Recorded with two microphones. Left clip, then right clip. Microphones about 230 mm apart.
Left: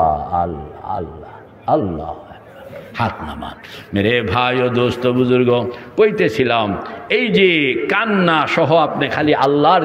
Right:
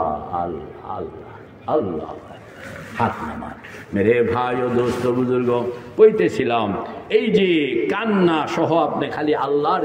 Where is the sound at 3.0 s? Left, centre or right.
Left.